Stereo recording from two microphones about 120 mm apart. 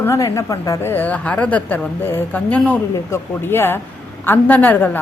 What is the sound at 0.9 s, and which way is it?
A woman's voice, 15° left (ahead or behind).